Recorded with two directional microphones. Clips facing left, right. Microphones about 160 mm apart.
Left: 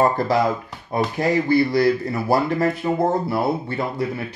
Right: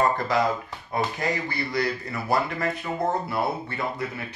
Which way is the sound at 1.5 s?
30° left (ahead or behind).